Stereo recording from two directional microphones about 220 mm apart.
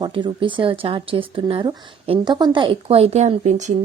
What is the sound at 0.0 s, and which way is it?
Speech, 20° right (ahead or behind).